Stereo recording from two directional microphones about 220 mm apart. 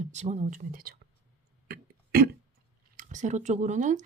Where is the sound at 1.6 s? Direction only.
45° right (ahead or behind).